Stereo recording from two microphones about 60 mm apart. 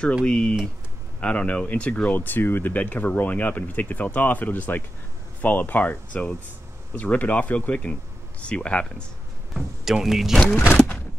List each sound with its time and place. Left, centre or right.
0.2 s speech: centre
2.1 s speech: left; by 9.0 s centre
9.5 s speech: centre